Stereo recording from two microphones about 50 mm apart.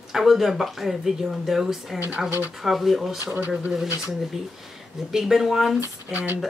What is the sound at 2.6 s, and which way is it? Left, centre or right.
Speech, centre.